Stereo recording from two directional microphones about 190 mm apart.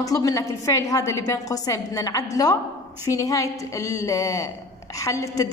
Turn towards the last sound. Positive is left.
turn(degrees=15)  # may be behind; listen again after turning